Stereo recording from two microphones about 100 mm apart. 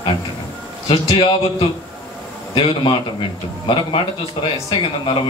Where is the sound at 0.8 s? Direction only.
65° left (ahead or behind).